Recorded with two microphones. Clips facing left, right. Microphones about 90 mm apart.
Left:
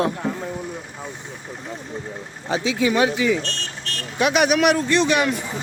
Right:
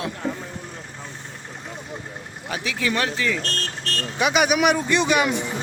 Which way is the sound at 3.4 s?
40° right (ahead or behind).